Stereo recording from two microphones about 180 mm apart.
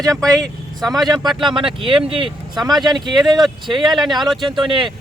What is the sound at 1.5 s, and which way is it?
Speech, 30° right (ahead or behind).